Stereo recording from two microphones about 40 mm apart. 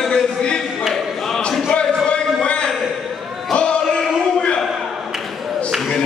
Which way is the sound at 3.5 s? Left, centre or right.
Left.